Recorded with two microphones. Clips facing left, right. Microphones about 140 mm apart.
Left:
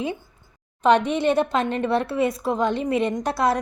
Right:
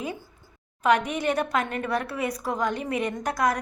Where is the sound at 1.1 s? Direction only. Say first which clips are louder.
Left 5 dB; 25° left (ahead or behind).